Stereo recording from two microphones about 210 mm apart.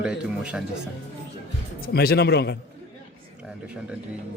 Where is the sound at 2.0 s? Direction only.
50° left (ahead or behind).